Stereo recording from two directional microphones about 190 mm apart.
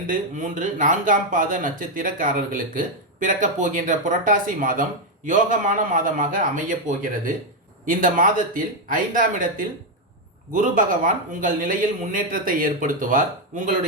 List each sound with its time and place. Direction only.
0.1 s speech: 45° right (ahead or behind)
7.9 s speech: 45° right (ahead or behind)